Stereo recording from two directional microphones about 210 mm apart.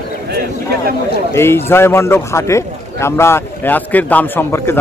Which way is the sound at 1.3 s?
10° left (ahead or behind).